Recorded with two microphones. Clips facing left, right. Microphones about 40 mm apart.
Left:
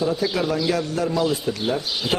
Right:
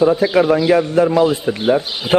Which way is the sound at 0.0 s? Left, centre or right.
Right.